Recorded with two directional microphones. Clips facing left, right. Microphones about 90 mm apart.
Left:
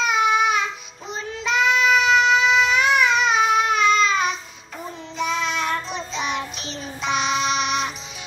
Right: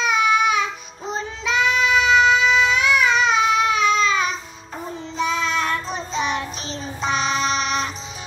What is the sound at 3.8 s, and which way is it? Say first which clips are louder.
Child singing: even; 40° right (ahead or behind).